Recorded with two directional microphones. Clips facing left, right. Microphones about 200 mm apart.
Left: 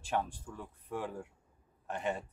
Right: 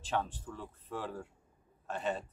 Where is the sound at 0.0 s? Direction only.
10° left (ahead or behind).